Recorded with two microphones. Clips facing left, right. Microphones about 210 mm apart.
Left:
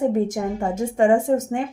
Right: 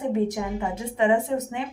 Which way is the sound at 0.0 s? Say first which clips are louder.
Left 4 dB; 45° left (ahead or behind).